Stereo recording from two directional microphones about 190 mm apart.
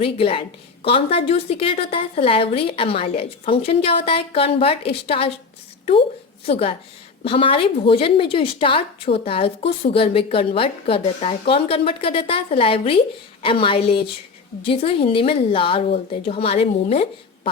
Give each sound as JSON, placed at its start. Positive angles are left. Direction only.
{"t": 0.0, "sound": "a woman's voice", "side_deg": 30}